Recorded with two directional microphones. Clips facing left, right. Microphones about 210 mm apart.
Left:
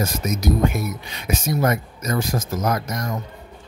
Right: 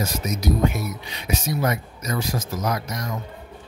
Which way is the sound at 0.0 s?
50° left (ahead or behind).